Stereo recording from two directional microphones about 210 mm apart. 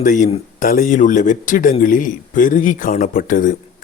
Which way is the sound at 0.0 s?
40° left (ahead or behind).